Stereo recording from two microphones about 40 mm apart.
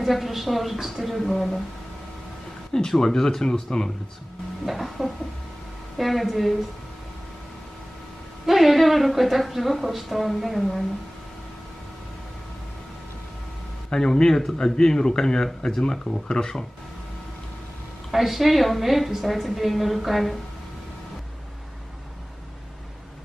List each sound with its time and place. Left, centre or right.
0.0 s a woman's voice: centre
2.7 s a man's voice: centre
4.6 s a woman's voice: centre
8.5 s a woman's voice: centre
13.9 s a man's voice: centre
18.1 s a woman's voice: centre